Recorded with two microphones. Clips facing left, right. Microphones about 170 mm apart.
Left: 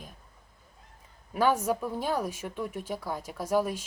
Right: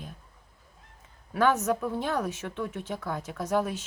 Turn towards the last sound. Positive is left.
turn(degrees=10)  # may be behind; listen again after turning